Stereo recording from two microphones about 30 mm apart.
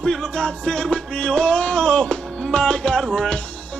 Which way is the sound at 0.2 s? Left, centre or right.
Left.